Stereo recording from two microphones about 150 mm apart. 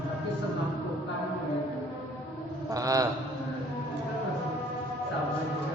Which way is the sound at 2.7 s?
25° right (ahead or behind).